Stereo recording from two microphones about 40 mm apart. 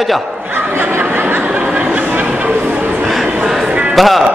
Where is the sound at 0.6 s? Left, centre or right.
Right.